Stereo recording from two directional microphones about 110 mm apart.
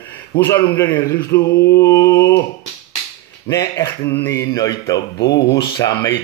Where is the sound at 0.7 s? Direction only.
20° left (ahead or behind).